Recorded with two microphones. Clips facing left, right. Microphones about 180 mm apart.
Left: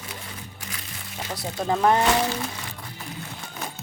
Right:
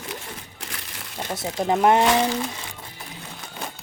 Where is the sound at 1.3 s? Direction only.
20° right (ahead or behind).